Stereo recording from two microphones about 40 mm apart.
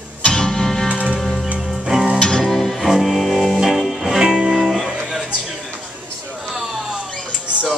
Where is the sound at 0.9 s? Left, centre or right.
Right.